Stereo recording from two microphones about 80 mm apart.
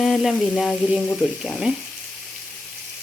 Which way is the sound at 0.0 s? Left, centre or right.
Centre.